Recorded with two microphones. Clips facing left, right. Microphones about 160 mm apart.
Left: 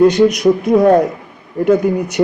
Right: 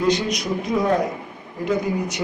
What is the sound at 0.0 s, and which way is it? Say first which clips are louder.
A man's voice: left 12 dB; 55° left (ahead or behind).